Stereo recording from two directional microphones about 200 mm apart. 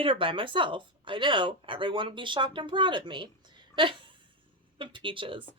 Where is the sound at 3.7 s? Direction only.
25° right (ahead or behind).